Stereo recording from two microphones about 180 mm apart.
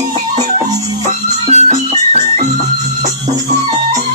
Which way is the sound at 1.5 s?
40° right (ahead or behind).